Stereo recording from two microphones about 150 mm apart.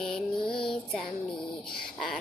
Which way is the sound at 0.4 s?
35° left (ahead or behind).